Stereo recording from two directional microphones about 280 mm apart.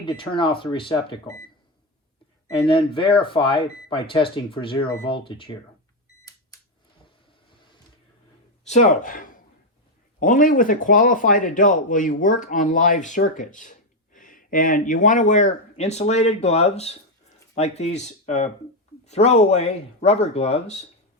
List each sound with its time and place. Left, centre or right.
0.0 s speech: centre
2.5 s speech: centre
8.6 s speech: left